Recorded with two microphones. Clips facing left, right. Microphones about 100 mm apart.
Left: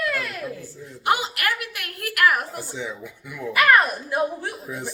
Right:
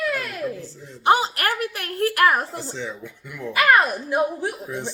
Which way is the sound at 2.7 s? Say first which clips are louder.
Even; 10° left (ahead or behind).